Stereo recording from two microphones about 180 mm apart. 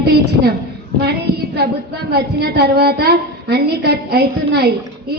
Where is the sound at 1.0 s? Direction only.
65° right (ahead or behind).